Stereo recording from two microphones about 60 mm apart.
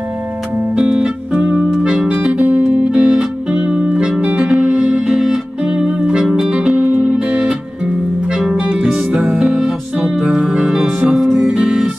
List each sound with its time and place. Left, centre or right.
0.8 s music: centre